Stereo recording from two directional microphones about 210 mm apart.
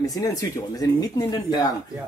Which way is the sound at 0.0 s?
15° left (ahead or behind).